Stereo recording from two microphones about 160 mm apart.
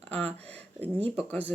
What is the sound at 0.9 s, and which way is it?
Speech, 35° right (ahead or behind).